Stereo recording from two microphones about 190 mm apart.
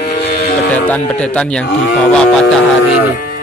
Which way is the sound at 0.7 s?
10° left (ahead or behind).